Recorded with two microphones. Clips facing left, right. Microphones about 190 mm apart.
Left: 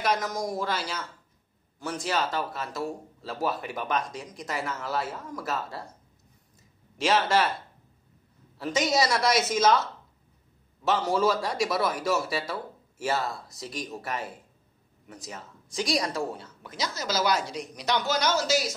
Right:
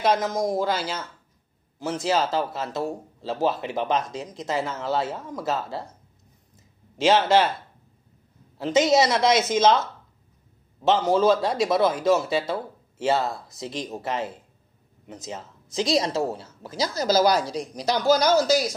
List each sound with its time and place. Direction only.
0.0 s speech: 25° right (ahead or behind)
2.0 s speech: 25° right (ahead or behind)
8.5 s speech: 25° right (ahead or behind)